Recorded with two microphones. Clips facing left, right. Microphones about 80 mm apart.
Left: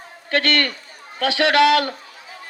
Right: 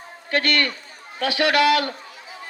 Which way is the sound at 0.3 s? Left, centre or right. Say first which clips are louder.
Left 2 dB; left.